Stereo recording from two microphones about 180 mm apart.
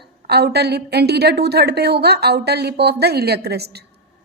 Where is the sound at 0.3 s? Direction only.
65° right (ahead or behind).